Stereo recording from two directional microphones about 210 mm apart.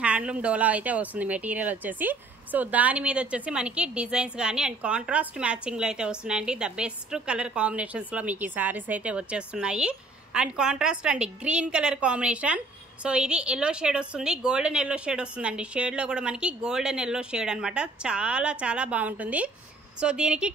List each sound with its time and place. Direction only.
0.0 s speech: 5° right (ahead or behind)